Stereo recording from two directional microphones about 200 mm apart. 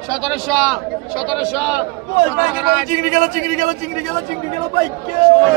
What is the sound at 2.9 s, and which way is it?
Speech, 40° right (ahead or behind).